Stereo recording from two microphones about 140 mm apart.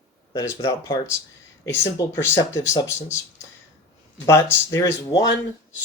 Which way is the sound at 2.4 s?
25° left (ahead or behind).